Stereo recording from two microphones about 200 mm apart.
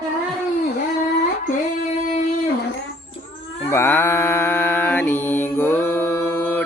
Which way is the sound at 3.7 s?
10° left (ahead or behind).